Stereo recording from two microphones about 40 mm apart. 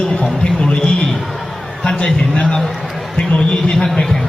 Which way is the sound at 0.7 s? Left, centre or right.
Left.